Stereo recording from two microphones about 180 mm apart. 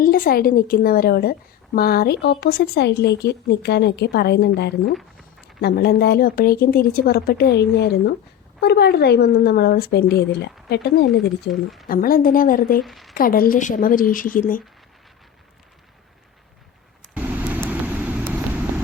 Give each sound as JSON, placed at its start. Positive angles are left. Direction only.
{"t": 0.0, "sound": "a woman's voice", "side_deg": 55}
{"t": 11.5, "sound": "speech", "side_deg": 0}
{"t": 11.9, "sound": "a woman's voice", "side_deg": 50}
{"t": 12.8, "sound": "speech", "side_deg": 0}
{"t": 13.1, "sound": "a woman's voice", "side_deg": 50}
{"t": 17.2, "sound": "vehicle", "side_deg": -10}